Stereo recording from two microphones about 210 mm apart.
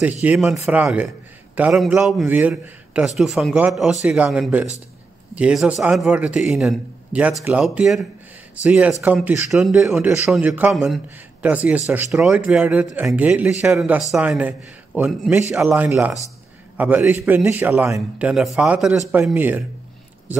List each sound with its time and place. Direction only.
0.2 s a man's voice: 5° right (ahead or behind)